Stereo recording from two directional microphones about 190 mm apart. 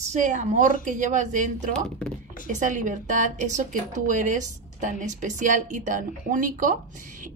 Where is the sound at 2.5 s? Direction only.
40° right (ahead or behind).